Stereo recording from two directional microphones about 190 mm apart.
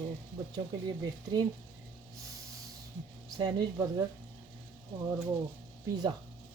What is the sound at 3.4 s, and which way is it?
Speech, 20° right (ahead or behind).